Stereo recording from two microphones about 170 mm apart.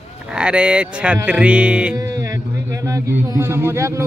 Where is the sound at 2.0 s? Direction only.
20° right (ahead or behind).